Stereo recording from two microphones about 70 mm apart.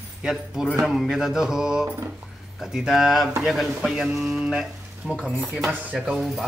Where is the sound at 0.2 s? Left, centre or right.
Centre.